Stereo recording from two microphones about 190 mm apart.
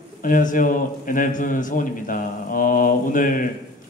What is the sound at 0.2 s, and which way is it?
A woman's voice, 45° left (ahead or behind).